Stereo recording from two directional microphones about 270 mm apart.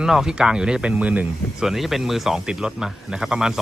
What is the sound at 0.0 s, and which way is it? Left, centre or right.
Speech, centre.